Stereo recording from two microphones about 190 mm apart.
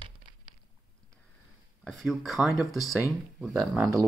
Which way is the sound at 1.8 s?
Centre (ahead or behind).